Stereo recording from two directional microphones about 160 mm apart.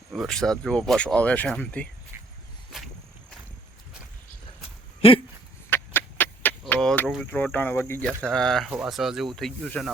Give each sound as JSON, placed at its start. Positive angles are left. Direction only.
{"t": 0.1, "sound": "speech", "side_deg": 0}
{"t": 2.7, "sound": "walk", "side_deg": 0}
{"t": 5.0, "sound": "dog", "side_deg": 35}
{"t": 5.7, "sound": "a sound", "side_deg": 15}
{"t": 7.3, "sound": "speech", "side_deg": 10}